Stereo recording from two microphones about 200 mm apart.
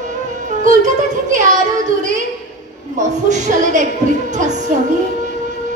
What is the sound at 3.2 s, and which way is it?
A woman's voice, 35° right (ahead or behind).